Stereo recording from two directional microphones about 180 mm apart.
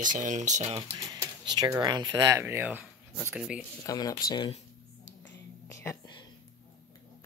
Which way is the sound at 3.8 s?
20° left (ahead or behind).